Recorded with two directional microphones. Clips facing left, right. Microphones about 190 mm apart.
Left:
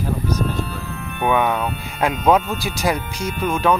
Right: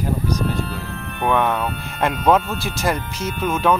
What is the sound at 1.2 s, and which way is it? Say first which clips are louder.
Speech: left 1 dB; centre (ahead or behind).